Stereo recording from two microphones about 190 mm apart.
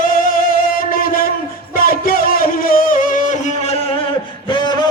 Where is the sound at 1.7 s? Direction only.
50° left (ahead or behind).